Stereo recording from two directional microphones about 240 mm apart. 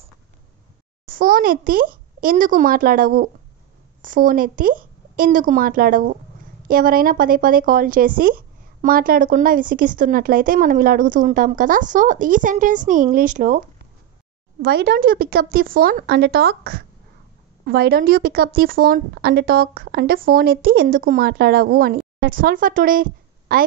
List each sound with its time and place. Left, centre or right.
1.0 s a child's voice: right
14.6 s speech: right